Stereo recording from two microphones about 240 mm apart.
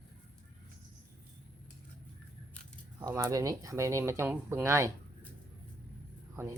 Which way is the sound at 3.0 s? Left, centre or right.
Centre.